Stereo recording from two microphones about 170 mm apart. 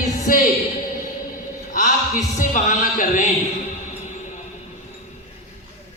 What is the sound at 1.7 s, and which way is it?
A man's voice, 50° left (ahead or behind).